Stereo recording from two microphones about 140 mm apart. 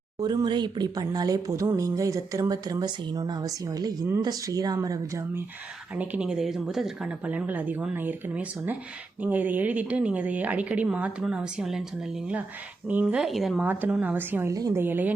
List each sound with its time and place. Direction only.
0.2 s speech: 30° right (ahead or behind)
6.0 s speech: 10° right (ahead or behind)
12.9 s speech: 10° right (ahead or behind)